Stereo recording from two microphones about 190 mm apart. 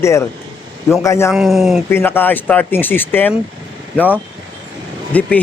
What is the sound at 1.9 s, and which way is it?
Speech, 10° left (ahead or behind).